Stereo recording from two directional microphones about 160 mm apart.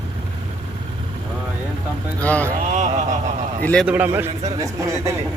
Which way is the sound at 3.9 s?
10° right (ahead or behind).